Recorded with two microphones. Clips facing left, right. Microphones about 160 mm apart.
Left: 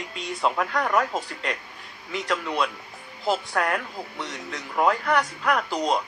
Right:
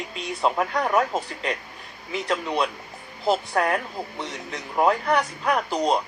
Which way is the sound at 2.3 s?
20° right (ahead or behind).